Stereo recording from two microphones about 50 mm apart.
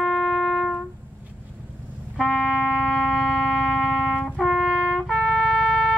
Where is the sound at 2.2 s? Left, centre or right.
Centre.